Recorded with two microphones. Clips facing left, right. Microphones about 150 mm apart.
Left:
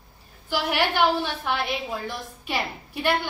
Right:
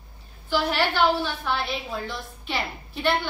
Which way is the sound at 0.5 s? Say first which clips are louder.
Right 1 dB; 15° left (ahead or behind).